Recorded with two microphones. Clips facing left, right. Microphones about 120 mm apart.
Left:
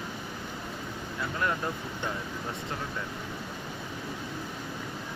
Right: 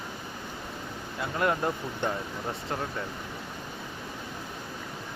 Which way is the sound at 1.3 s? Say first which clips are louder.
Right 4 dB; 30° right (ahead or behind).